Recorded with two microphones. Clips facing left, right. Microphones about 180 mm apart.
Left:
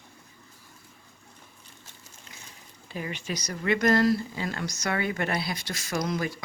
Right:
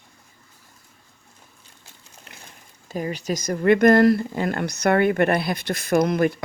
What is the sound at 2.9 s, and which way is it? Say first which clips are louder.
Speech: right 7 dB; 40° right (ahead or behind).